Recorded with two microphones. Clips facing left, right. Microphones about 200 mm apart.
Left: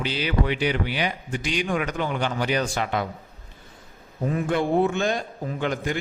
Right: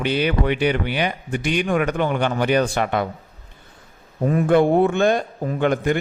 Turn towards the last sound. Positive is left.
turn(degrees=-55)  # may be behind; listen again after turning